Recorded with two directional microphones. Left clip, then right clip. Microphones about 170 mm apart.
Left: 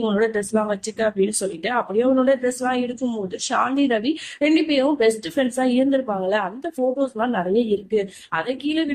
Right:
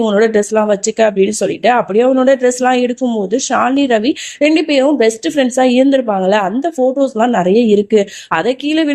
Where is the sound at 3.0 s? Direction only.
30° right (ahead or behind).